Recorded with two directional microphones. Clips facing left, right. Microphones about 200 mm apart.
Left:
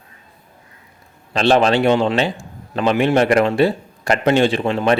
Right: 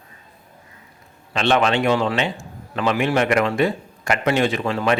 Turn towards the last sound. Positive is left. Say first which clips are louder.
# left 4 dB
turn(degrees=25)  # may be behind; listen again after turning